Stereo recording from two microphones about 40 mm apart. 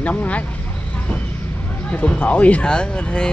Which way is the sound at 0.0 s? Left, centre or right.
Left.